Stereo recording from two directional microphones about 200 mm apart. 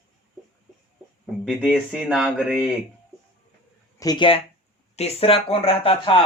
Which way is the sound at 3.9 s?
20° left (ahead or behind).